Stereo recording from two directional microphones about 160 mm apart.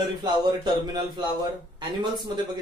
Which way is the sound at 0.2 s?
25° right (ahead or behind).